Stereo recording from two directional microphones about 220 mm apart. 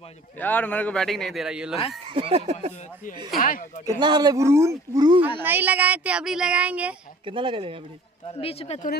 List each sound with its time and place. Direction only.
0.4 s speech: 10° left (ahead or behind)
2.0 s a sound: 25° right (ahead or behind)
3.3 s speech: 40° left (ahead or behind)
4.0 s a man's voice: 20° right (ahead or behind)
7.2 s a sound: 25° right (ahead or behind)
8.3 s speech: 25° left (ahead or behind)